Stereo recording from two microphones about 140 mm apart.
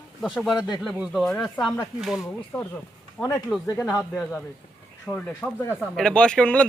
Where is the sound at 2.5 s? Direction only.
15° left (ahead or behind).